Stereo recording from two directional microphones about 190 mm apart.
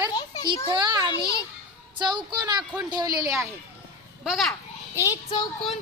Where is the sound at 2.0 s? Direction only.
25° right (ahead or behind).